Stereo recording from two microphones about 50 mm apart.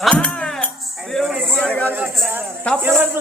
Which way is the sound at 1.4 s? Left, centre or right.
Centre.